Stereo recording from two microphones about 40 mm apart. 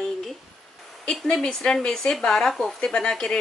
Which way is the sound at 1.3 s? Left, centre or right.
Centre.